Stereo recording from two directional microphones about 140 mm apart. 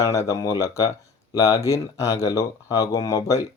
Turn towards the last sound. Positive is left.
turn(degrees=25)  # may be behind; listen again after turning